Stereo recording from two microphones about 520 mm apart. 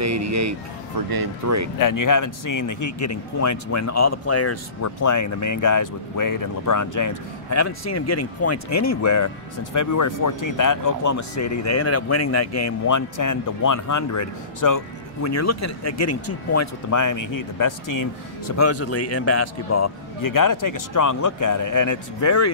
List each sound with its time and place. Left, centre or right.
0.0 s speech: right
1.8 s a man's voice: left